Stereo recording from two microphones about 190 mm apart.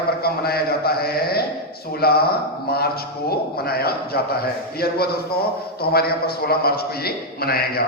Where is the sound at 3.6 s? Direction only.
55° left (ahead or behind).